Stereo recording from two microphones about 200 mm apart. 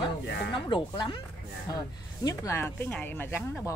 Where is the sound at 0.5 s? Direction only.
25° left (ahead or behind).